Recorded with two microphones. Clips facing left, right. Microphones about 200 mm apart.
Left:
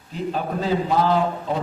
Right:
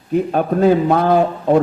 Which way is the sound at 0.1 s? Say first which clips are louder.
Right 9 dB; 60° right (ahead or behind).